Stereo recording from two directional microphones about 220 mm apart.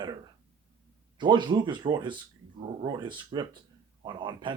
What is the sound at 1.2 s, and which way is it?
Speech, 20° right (ahead or behind).